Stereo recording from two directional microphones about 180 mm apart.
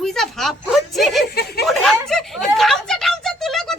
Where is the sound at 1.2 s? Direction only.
60° left (ahead or behind).